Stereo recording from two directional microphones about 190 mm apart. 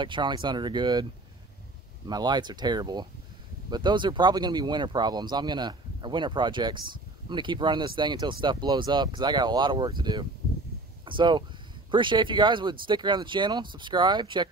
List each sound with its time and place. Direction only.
0.0 s speech: 25° right (ahead or behind)
2.0 s speech: 20° right (ahead or behind)